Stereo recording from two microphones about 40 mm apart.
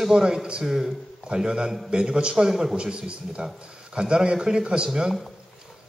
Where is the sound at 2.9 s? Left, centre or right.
Right.